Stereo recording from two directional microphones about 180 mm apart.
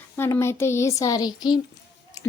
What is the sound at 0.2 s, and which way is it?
Speech, 15° left (ahead or behind).